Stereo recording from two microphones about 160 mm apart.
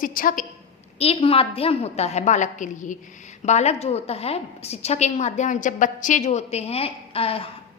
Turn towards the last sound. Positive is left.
turn(degrees=35)  # may be behind; listen again after turning